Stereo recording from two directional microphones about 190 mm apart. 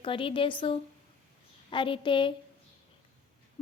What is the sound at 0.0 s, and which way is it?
A woman's voice, 25° left (ahead or behind).